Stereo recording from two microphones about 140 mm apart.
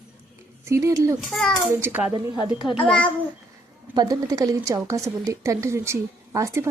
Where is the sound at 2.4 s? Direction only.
35° left (ahead or behind).